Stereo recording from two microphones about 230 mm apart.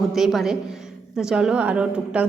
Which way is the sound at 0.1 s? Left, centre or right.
Centre.